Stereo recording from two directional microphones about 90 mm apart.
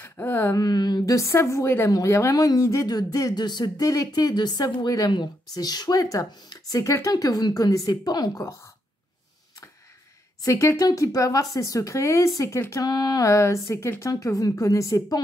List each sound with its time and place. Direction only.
0.0 s a sound: 25° left (ahead or behind)
0.6 s a woman's voice: 50° left (ahead or behind)
6.8 s a woman's voice: 35° left (ahead or behind)
10.4 s a woman's voice: 35° left (ahead or behind)
12.8 s a woman's voice: 45° left (ahead or behind)